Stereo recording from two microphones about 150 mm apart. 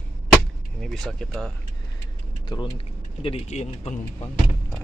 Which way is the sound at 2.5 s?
35° left (ahead or behind).